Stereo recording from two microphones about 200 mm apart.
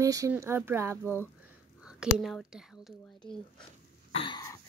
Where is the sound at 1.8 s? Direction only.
5° right (ahead or behind).